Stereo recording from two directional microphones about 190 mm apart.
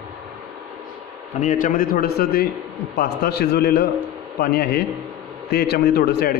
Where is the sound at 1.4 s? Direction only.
40° left (ahead or behind).